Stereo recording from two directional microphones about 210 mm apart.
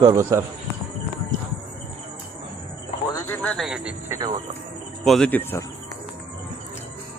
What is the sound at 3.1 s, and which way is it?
Speech, 15° left (ahead or behind).